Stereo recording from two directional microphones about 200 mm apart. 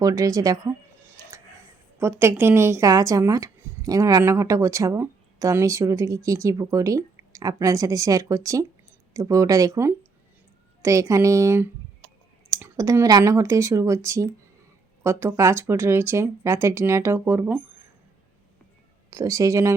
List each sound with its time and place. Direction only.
0.0 s speech: 15° right (ahead or behind)
2.0 s speech: 10° right (ahead or behind)
19.1 s speech: 15° right (ahead or behind)